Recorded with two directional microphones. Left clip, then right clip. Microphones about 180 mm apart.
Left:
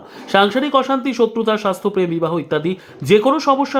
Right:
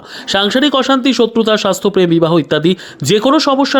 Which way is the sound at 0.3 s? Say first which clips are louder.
Right 2 dB; 30° right (ahead or behind).